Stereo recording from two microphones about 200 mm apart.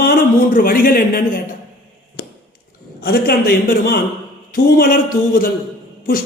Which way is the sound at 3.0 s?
50° left (ahead or behind).